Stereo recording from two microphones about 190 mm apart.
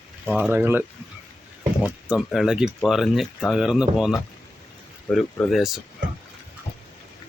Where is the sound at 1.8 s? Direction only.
5° right (ahead or behind).